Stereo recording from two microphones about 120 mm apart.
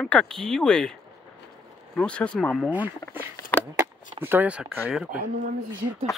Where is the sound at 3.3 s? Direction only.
15° left (ahead or behind).